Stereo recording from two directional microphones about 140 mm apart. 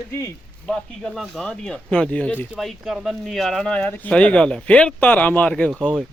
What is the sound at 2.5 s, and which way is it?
Speech, centre (ahead or behind).